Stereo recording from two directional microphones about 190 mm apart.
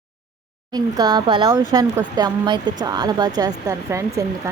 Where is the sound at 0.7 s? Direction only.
20° right (ahead or behind).